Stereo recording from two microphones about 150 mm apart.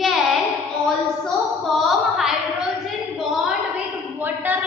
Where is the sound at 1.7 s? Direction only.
Centre (ahead or behind).